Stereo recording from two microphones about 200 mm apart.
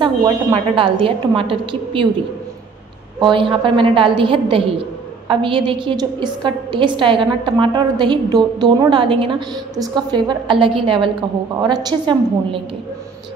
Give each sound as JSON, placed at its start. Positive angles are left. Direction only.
{"t": 0.0, "sound": "a woman's voice", "side_deg": -25}
{"t": 3.2, "sound": "a woman's voice", "side_deg": -25}